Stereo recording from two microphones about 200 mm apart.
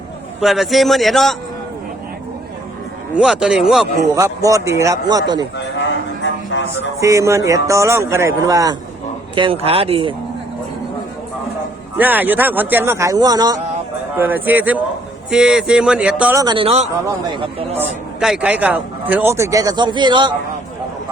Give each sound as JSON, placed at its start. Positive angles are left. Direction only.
{"t": 0.4, "sound": "speech", "side_deg": 0}
{"t": 3.2, "sound": "speech", "side_deg": -5}
{"t": 4.1, "sound": "a man's voice", "side_deg": -15}
{"t": 5.5, "sound": "a sound", "side_deg": 65}
{"t": 7.0, "sound": "a man's voice", "side_deg": -15}
{"t": 11.9, "sound": "a man's voice", "side_deg": -10}
{"t": 16.4, "sound": "speech", "side_deg": -25}
{"t": 17.7, "sound": "a man's voice", "side_deg": -5}